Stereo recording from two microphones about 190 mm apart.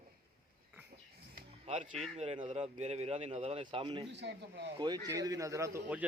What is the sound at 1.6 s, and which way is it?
Speech, 35° right (ahead or behind).